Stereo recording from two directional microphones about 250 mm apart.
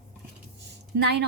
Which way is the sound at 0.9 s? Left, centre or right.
Right.